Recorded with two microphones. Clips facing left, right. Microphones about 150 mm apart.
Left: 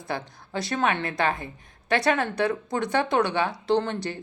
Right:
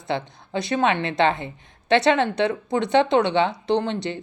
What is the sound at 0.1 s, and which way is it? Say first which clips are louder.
A woman's voice: right 5 dB; 25° right (ahead or behind).